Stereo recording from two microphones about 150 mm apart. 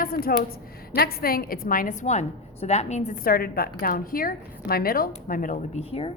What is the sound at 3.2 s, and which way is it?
A woman's voice, 85° left.